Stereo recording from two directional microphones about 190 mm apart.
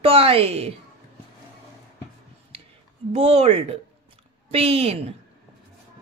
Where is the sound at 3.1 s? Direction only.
35° right (ahead or behind).